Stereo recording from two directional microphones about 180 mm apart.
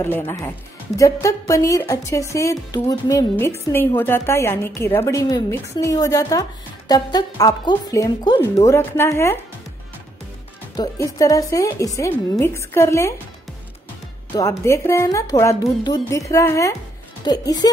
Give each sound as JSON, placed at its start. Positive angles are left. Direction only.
{"t": 0.0, "sound": "speech", "side_deg": 10}
{"t": 10.8, "sound": "speech", "side_deg": 20}
{"t": 14.6, "sound": "speech", "side_deg": 15}